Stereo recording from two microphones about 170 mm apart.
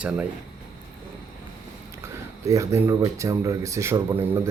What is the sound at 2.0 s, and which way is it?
Speech, 15° right (ahead or behind).